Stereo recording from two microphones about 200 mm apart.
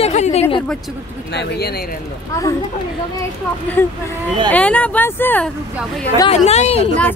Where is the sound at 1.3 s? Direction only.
55° left (ahead or behind).